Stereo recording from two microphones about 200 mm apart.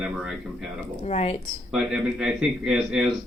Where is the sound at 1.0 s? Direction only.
30° left (ahead or behind).